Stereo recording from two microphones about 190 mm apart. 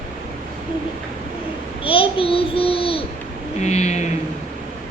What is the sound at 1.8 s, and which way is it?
Child singing, 30° left (ahead or behind).